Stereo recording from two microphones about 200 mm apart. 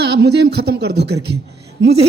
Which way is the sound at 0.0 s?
55° right (ahead or behind).